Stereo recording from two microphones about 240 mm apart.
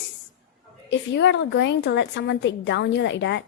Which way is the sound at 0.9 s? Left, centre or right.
Left.